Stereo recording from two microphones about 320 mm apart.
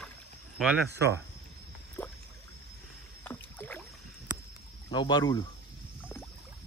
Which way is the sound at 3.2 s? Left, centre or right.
Centre.